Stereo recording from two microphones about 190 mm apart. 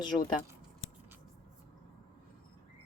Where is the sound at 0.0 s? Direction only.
20° left (ahead or behind).